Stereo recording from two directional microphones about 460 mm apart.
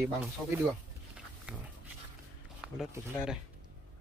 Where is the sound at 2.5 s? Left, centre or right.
Centre.